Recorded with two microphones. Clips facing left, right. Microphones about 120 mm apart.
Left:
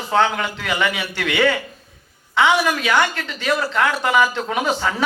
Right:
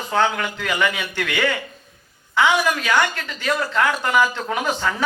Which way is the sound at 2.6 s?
20° left (ahead or behind).